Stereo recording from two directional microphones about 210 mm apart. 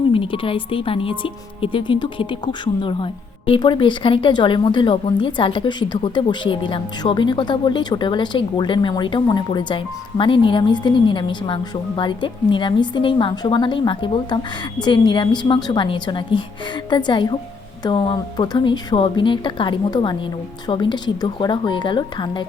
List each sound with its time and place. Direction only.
0.1 s speech: 25° left (ahead or behind)